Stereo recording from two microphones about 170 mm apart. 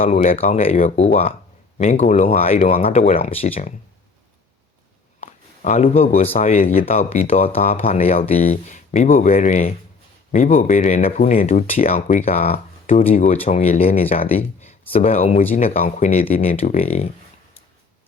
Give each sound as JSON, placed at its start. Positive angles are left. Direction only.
{"t": 0.1, "sound": "speech", "side_deg": 40}
{"t": 2.4, "sound": "speech", "side_deg": 35}
{"t": 5.2, "sound": "a sound", "side_deg": 45}
{"t": 6.1, "sound": "speech", "side_deg": 35}
{"t": 6.4, "sound": "speech", "side_deg": 50}
{"t": 6.9, "sound": "speech", "side_deg": 40}
{"t": 12.0, "sound": "speech", "side_deg": 50}
{"t": 15.7, "sound": "speech", "side_deg": 55}
{"t": 16.3, "sound": "speech", "side_deg": 35}